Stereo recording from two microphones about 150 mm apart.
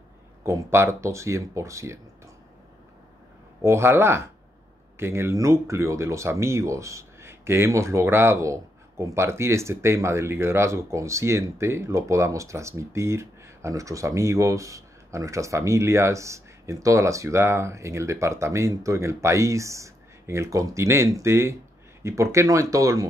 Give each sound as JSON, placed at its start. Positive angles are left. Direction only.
{"t": 0.4, "sound": "speech", "side_deg": -20}
{"t": 3.6, "sound": "speech", "side_deg": -15}